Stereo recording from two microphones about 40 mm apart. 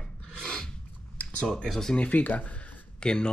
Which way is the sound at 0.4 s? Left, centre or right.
Centre.